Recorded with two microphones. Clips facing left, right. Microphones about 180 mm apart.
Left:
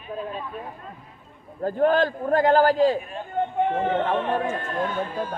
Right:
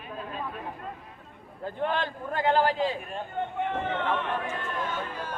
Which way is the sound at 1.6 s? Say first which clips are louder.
Left 9 dB; 45° left (ahead or behind).